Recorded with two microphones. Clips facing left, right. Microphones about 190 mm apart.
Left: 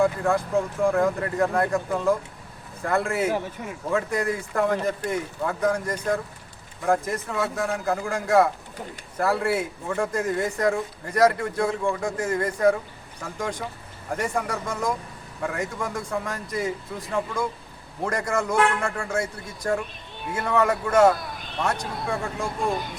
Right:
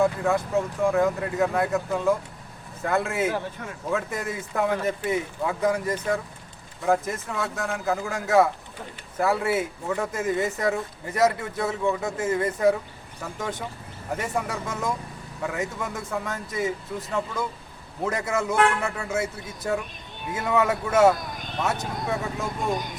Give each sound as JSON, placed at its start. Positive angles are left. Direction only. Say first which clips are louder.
{"t": 0.0, "sound": "speech", "louder": "left 1 dB", "side_deg": -5}
{"t": 18.0, "sound": "speech", "louder": "even", "side_deg": -5}